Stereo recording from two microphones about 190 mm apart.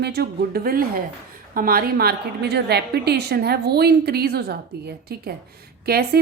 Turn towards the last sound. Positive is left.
turn(degrees=-55)  # may be behind; listen again after turning